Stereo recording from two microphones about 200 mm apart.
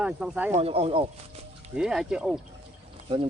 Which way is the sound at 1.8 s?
5° right (ahead or behind).